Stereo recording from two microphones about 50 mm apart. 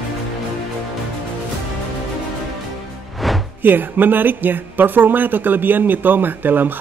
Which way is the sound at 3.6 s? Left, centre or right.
Right.